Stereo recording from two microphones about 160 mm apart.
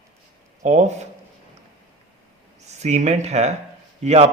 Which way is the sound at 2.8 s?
45° right (ahead or behind).